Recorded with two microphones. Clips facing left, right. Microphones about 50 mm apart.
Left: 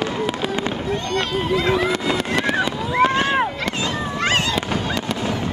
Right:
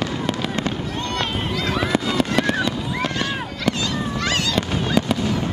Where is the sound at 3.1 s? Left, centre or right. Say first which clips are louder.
Left 6 dB; left.